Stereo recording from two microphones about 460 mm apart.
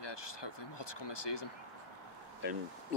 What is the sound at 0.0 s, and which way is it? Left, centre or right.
Speech, left.